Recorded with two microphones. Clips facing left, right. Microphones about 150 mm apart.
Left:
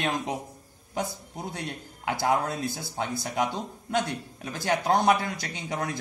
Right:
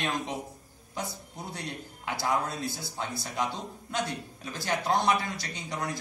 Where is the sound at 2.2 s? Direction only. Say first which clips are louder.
Left 3 dB; 50° left (ahead or behind).